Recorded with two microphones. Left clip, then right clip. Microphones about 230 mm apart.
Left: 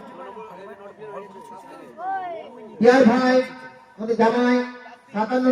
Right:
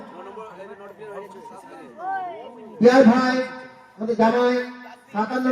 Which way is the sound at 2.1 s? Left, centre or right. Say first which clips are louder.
Even; left.